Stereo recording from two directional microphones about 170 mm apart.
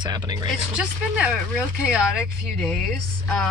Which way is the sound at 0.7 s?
5° right (ahead or behind).